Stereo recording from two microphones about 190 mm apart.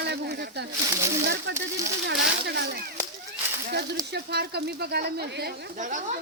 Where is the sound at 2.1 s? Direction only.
60° right (ahead or behind).